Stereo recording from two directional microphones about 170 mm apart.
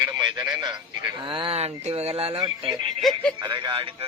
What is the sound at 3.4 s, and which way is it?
Speech, 30° right (ahead or behind).